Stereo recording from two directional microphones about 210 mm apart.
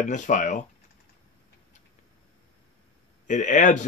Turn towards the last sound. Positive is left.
turn(degrees=35)  # may be behind; listen again after turning